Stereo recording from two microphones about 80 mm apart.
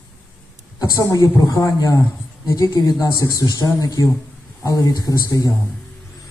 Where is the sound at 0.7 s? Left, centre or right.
Left.